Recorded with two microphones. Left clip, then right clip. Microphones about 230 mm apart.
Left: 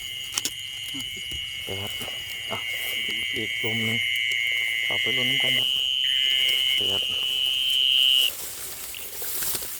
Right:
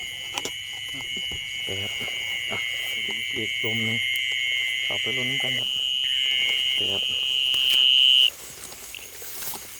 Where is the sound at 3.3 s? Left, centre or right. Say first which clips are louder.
Even; left.